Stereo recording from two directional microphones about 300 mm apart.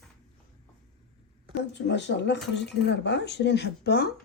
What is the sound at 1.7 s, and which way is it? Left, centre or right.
Speech, left.